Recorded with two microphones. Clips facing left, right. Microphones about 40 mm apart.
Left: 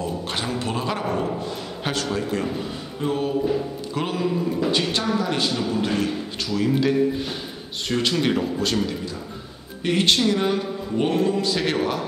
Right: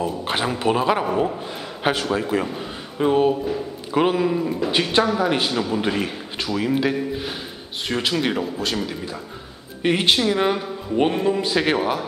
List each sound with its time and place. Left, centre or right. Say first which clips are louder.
0.0 s a man's voice: right 4 dB; right
3.0 s a man's voice: right 5 dB; right; by 8.9 s centre
9.8 s a man's voice: right 1 dB; centre